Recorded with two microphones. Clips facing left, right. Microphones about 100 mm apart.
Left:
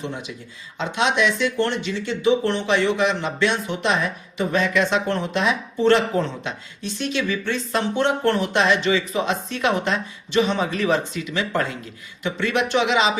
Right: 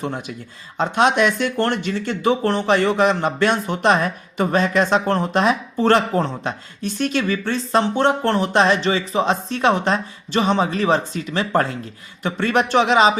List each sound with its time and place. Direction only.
0.0 s speech: 45° right (ahead or behind)